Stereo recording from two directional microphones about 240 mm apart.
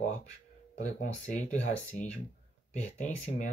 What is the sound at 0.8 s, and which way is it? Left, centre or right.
Speech, left.